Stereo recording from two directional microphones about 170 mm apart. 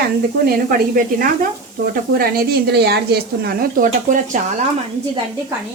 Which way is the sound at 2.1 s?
70° right (ahead or behind).